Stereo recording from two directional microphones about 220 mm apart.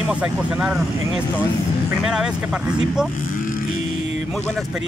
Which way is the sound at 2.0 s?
5° right (ahead or behind).